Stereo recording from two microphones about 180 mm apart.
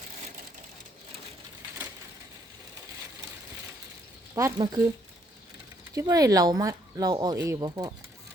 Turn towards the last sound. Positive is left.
turn(degrees=-20)  # may be behind; listen again after turning